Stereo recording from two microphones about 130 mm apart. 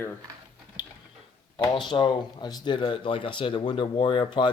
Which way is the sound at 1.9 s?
40° left (ahead or behind).